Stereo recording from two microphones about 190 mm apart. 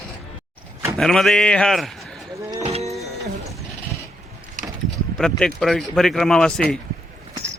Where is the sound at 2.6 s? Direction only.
35° right (ahead or behind).